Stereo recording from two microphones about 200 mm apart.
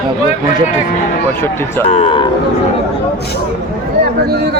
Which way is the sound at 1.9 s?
30° left (ahead or behind).